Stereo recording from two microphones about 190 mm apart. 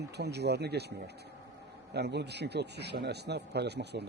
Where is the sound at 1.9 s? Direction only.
60° right (ahead or behind).